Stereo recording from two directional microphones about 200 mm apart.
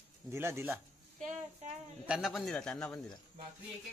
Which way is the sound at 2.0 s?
Centre (ahead or behind).